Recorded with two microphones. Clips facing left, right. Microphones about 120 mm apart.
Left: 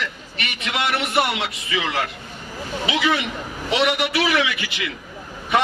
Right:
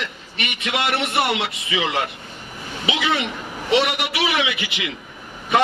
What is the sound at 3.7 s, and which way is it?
A man's voice, 30° right (ahead or behind).